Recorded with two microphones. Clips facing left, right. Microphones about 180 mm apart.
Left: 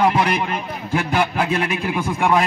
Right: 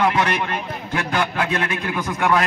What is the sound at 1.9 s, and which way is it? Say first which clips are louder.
Speech: left 1 dB; 30° left (ahead or behind).